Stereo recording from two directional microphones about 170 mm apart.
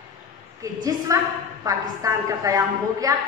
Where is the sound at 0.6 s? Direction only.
20° right (ahead or behind).